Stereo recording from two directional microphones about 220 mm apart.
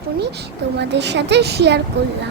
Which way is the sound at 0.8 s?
50° right (ahead or behind).